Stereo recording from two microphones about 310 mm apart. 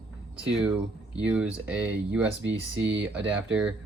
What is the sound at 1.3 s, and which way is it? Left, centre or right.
Speech, centre.